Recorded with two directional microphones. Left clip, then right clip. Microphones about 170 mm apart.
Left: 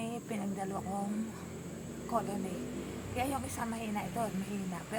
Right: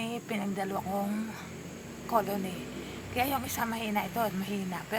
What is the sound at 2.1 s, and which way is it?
A woman's voice, 30° right (ahead or behind).